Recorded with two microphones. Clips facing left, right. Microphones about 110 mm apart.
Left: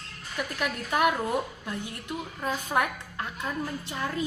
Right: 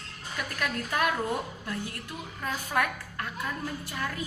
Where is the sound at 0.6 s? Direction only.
20° left (ahead or behind).